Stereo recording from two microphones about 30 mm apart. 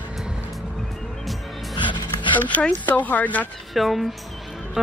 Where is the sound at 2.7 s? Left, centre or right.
Left.